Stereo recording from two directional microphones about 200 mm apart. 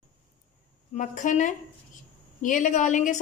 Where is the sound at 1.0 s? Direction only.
40° left (ahead or behind).